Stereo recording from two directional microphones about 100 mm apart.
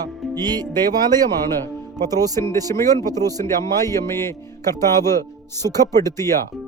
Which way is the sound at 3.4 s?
30° left (ahead or behind).